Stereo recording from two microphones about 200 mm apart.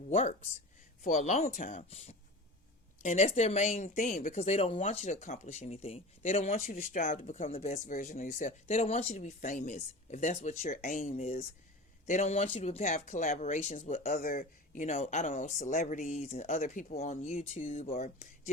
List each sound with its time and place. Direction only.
0.1 s speech: 35° left (ahead or behind)